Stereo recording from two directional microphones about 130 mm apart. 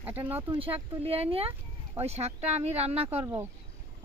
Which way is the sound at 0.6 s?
45° right (ahead or behind).